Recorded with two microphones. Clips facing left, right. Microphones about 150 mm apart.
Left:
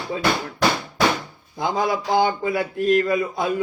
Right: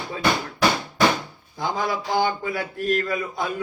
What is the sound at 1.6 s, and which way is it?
Speech, 20° left (ahead or behind).